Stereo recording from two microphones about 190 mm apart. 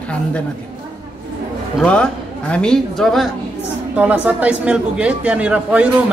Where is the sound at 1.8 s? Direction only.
5° left (ahead or behind).